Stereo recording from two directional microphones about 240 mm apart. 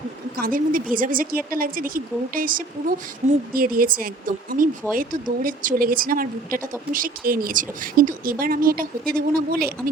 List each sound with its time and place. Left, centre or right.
0.3 s speech: right